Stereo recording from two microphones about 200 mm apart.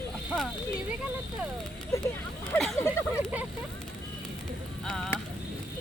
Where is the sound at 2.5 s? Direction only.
Centre (ahead or behind).